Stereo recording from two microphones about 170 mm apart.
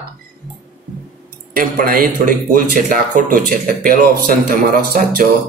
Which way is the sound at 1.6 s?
55° right (ahead or behind).